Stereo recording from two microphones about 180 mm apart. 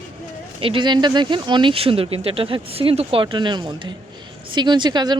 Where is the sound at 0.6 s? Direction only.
30° right (ahead or behind).